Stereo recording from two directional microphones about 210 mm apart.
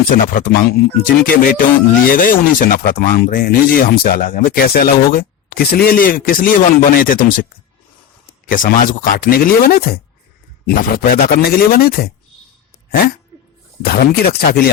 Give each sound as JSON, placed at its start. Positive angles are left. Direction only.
{"t": 0.1, "sound": "speech", "side_deg": 45}
{"t": 8.4, "sound": "speech", "side_deg": 40}